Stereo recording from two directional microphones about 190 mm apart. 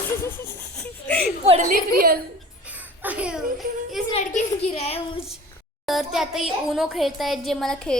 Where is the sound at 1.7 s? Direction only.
50° right (ahead or behind).